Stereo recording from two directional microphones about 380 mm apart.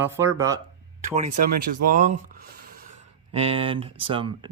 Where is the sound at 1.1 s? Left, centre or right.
Centre.